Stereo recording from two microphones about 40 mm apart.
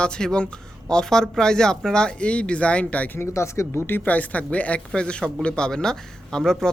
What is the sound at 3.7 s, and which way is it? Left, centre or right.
Speech, left.